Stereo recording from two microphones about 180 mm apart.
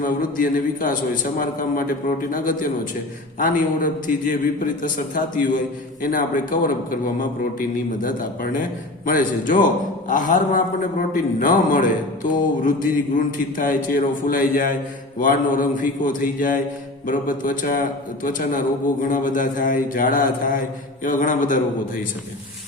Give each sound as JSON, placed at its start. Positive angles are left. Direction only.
{"t": 0.0, "sound": "speech", "side_deg": 50}